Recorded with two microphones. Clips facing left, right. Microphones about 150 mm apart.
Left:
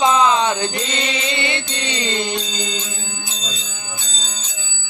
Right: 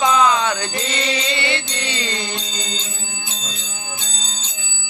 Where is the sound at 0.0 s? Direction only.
25° left (ahead or behind).